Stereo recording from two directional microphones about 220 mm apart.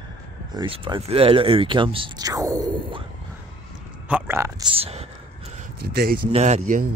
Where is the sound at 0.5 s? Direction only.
20° right (ahead or behind).